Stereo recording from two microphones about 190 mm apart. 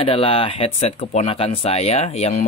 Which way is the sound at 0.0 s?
30° left (ahead or behind).